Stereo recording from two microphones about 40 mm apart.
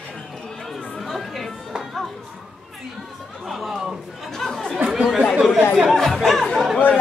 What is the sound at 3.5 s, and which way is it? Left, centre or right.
Chatter, centre.